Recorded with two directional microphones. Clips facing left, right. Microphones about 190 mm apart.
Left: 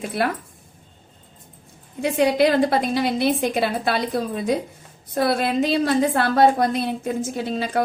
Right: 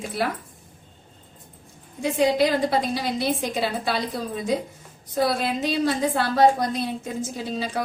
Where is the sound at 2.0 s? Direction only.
65° left (ahead or behind).